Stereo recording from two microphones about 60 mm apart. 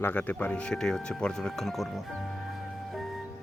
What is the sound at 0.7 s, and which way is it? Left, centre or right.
Speech, centre.